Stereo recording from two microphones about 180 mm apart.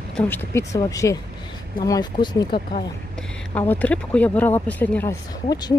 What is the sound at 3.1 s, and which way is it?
Speech, 10° left (ahead or behind).